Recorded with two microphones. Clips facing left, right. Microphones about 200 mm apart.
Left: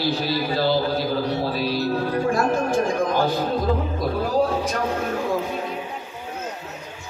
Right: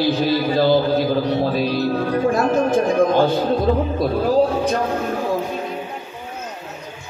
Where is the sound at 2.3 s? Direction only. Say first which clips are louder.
Right 4 dB; 20° right (ahead or behind).